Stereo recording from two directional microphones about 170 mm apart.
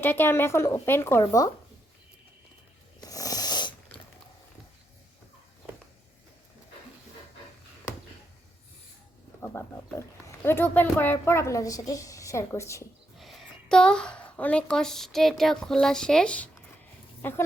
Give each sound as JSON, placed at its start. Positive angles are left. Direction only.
{"t": 0.0, "sound": "a woman's voice", "side_deg": 10}
{"t": 3.1, "sound": "snoring", "side_deg": 20}
{"t": 9.4, "sound": "a woman's voice", "side_deg": 15}
{"t": 13.1, "sound": "a woman's voice", "side_deg": 0}